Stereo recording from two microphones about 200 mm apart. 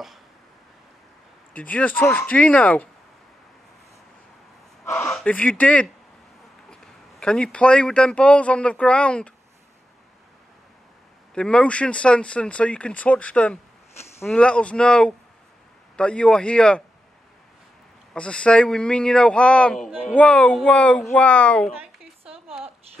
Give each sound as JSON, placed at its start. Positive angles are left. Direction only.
{"t": 1.6, "sound": "speech", "side_deg": 5}
{"t": 4.8, "sound": "a sound", "side_deg": 15}
{"t": 5.1, "sound": "speech", "side_deg": 5}
{"t": 11.3, "sound": "speech", "side_deg": 5}
{"t": 18.1, "sound": "speech", "side_deg": 5}
{"t": 22.2, "sound": "a sound", "side_deg": -30}